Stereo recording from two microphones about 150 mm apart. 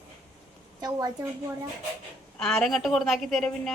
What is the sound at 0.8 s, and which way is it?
Speech, 25° right (ahead or behind).